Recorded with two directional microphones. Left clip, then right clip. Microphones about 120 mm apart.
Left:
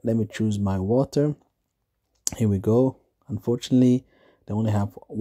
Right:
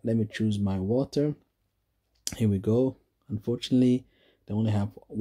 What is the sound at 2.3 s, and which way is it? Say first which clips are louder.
Speech: left 4 dB; 40° left (ahead or behind).